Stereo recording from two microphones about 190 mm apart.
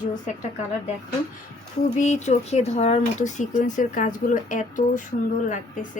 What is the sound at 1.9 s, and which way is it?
A woman's voice, 40° left (ahead or behind).